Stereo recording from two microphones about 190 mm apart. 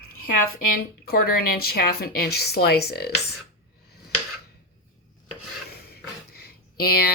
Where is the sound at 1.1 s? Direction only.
50° left (ahead or behind).